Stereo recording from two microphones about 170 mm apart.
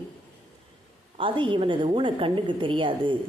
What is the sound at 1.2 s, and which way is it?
A woman's voice, 30° right (ahead or behind).